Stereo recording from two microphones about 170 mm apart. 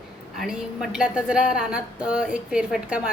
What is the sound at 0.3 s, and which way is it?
A woman's voice, centre (ahead or behind).